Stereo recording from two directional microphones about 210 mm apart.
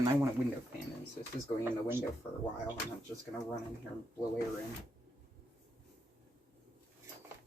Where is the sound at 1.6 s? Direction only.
10° right (ahead or behind).